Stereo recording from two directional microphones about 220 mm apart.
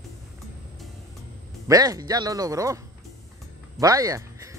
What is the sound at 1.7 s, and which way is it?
Speech, 15° right (ahead or behind).